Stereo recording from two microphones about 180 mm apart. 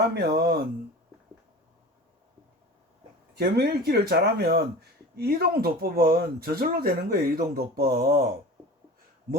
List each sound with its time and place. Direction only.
0.1 s speech: 65° right (ahead or behind)
3.3 s speech: 60° right (ahead or behind)